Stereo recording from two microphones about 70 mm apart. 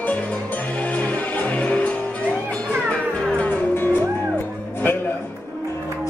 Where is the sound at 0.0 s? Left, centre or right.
Left.